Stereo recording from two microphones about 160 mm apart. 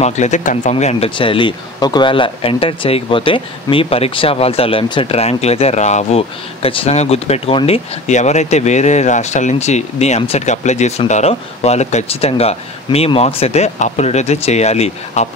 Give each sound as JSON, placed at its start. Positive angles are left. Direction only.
{"t": 0.0, "sound": "speech", "side_deg": 50}